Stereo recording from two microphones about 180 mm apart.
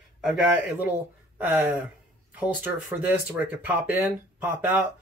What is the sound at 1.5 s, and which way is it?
Speech, 10° right (ahead or behind).